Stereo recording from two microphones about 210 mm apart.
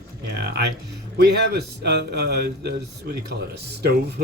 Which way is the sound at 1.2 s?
50° right (ahead or behind).